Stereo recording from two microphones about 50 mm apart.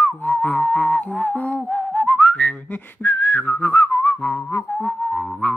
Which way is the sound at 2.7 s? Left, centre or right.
Left.